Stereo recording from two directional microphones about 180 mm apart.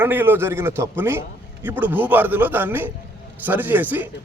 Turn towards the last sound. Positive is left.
turn(degrees=-10)  # may be behind; listen again after turning